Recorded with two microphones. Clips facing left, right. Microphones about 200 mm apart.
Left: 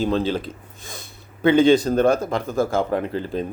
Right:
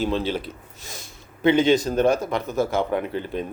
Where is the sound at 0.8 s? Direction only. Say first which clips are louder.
Left 1 dB; 55° left (ahead or behind).